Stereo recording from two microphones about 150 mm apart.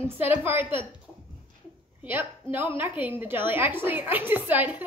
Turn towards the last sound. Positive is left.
turn(degrees=-10)  # may be behind; listen again after turning